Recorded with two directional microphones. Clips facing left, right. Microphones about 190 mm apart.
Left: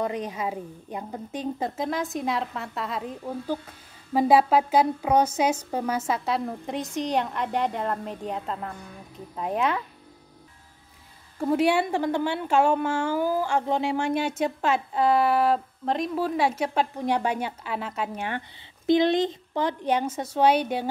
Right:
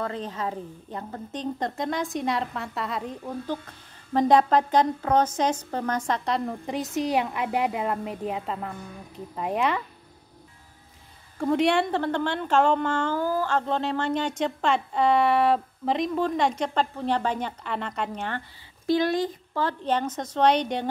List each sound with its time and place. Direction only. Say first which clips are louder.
0.0 s a woman's voice: left 2 dB; 15° left (ahead or behind)
11.3 s a woman's voice: even; 5° left (ahead or behind)
18.9 s a woman's voice: left 3 dB; 20° left (ahead or behind)